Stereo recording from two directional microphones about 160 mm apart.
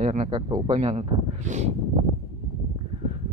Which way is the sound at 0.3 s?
25° right (ahead or behind).